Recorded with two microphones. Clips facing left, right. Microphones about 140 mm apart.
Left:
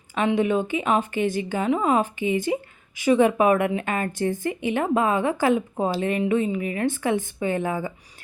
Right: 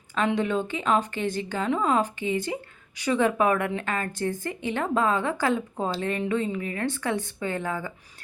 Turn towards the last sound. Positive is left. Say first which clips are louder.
# left 5 dB
turn(degrees=15)  # may be behind; listen again after turning